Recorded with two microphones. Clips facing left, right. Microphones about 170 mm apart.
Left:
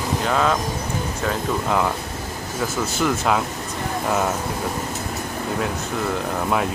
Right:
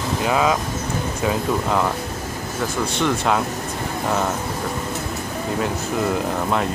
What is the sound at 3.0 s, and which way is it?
Speech, centre (ahead or behind).